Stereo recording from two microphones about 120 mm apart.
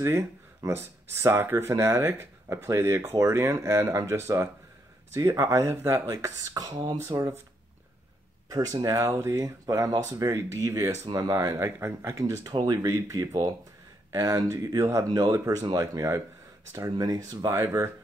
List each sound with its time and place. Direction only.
0.0 s speech: 25° right (ahead or behind)
8.8 s speech: 30° right (ahead or behind)